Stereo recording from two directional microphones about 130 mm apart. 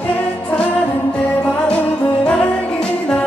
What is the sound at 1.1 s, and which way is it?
Music, 10° left (ahead or behind).